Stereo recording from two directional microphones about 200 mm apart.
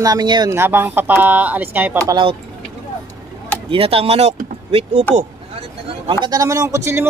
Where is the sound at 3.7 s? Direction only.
30° right (ahead or behind).